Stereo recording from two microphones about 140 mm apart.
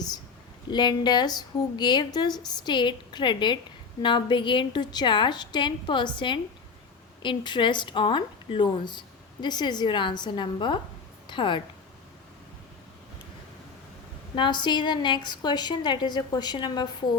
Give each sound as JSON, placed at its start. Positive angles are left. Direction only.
{"t": 0.7, "sound": "speech", "side_deg": 30}
{"t": 14.3, "sound": "speech", "side_deg": 35}